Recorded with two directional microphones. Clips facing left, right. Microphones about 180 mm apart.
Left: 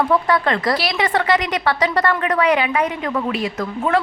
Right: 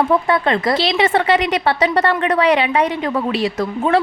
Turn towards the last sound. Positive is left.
turn(degrees=-30)  # may be behind; listen again after turning